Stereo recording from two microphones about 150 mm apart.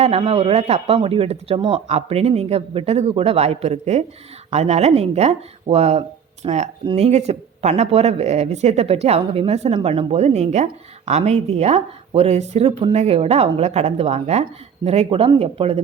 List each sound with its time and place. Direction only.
0.0 s speech: 40° right (ahead or behind)